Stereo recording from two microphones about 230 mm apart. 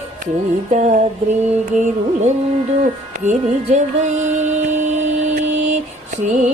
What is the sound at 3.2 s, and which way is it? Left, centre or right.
Music, right.